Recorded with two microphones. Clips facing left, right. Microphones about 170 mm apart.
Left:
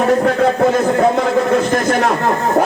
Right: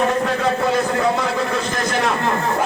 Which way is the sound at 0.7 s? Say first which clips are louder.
Left 5 dB; 45° left (ahead or behind).